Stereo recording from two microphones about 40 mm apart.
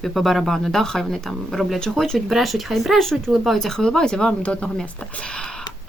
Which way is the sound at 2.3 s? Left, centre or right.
Centre.